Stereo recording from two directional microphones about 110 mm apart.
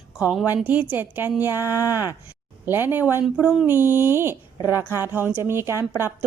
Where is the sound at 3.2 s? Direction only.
10° right (ahead or behind).